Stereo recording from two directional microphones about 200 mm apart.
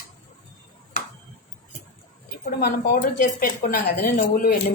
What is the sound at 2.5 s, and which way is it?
Speech, 50° left (ahead or behind).